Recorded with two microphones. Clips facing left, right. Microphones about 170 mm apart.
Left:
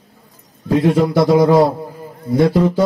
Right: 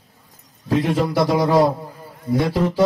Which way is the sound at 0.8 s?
50° left (ahead or behind).